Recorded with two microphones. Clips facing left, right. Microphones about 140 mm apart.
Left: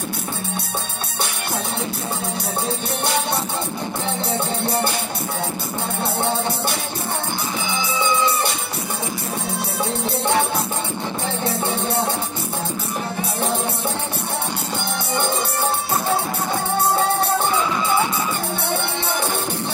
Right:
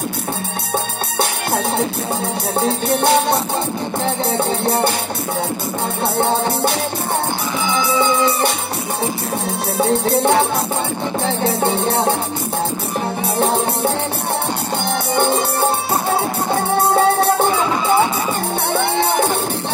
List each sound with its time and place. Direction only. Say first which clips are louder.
3.0 s music: right 9 dB; 55° right (ahead or behind)
9.8 s music: right 10 dB; 55° right (ahead or behind)
11.6 s music: right 6 dB; 65° right (ahead or behind)
13.4 s music: right 7 dB; 65° right (ahead or behind)